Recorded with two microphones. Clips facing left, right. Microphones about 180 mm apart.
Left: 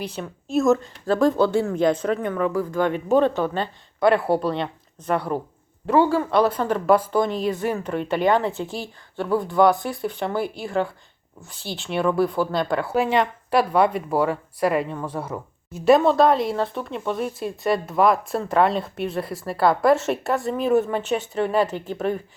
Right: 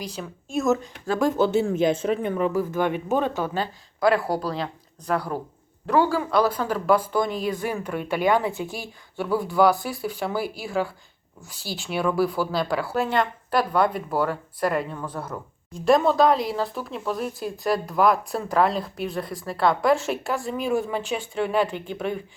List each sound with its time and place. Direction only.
0.2 s speech: centre (ahead or behind)
1.3 s speech: 20° right (ahead or behind)
2.5 s speech: 5° right (ahead or behind)